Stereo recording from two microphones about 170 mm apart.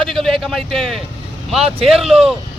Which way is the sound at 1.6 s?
35° right (ahead or behind).